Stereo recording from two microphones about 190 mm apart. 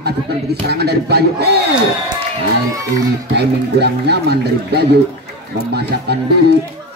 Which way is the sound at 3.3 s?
60° right (ahead or behind).